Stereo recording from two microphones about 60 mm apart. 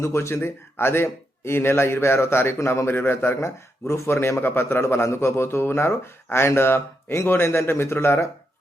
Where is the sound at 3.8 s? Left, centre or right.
Left.